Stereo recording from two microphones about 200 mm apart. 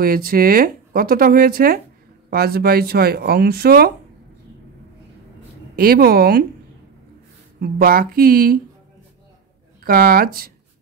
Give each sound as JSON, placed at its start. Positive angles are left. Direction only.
{"t": 0.0, "sound": "speech", "side_deg": -45}
{"t": 5.8, "sound": "speech", "side_deg": -50}
{"t": 7.6, "sound": "speech", "side_deg": -50}
{"t": 9.8, "sound": "speech", "side_deg": -45}